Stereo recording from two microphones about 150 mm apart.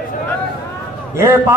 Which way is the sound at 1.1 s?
20° right (ahead or behind).